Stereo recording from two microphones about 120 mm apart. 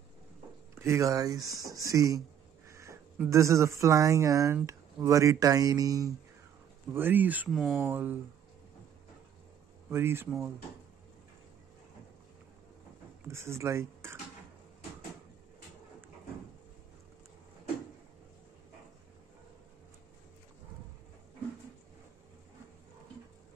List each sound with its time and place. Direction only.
0.7 s speech: 25° right (ahead or behind)
2.7 s a sound: 25° right (ahead or behind)
3.3 s speech: 25° right (ahead or behind)
6.9 s speech: 15° right (ahead or behind)
7.5 s speech: centre (ahead or behind)
7.8 s speech: 15° right (ahead or behind)
9.8 s speech: 20° right (ahead or behind)
13.2 s speech: 20° right (ahead or behind)